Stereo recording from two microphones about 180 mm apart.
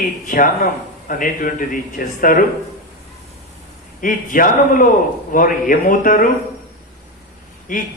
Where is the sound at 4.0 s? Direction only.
50° left (ahead or behind).